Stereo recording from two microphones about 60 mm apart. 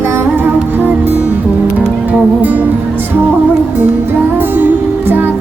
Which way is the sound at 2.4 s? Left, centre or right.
Right.